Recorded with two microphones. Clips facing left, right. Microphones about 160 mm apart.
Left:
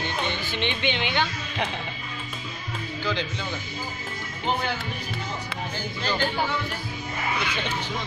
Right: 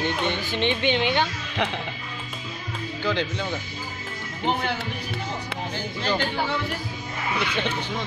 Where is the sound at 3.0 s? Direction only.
60° right (ahead or behind).